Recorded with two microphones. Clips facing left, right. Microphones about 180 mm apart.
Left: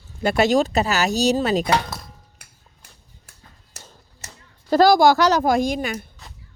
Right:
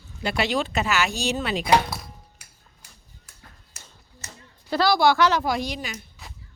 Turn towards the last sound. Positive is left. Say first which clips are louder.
# left 8 dB
turn(degrees=50)  # may be behind; listen again after turning